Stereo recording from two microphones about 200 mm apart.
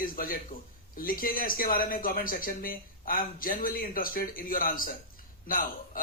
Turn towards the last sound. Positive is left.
turn(degrees=45)  # may be behind; listen again after turning